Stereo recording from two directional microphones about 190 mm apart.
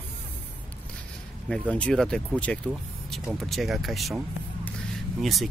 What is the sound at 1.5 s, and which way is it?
Speech, 5° left (ahead or behind).